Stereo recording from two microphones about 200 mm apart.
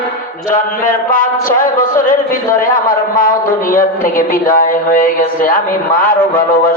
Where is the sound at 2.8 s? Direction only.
45° left (ahead or behind).